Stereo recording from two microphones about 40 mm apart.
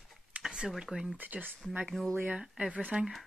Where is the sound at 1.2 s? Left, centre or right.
Right.